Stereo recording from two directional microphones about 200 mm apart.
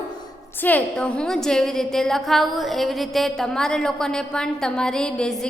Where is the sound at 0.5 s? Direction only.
10° left (ahead or behind).